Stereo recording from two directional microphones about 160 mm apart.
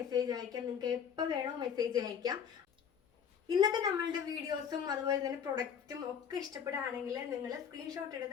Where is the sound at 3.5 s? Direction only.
25° right (ahead or behind).